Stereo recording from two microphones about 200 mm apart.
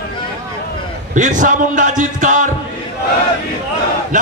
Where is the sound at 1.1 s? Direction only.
40° right (ahead or behind).